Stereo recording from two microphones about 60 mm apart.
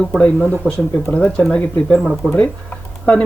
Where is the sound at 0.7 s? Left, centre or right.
Right.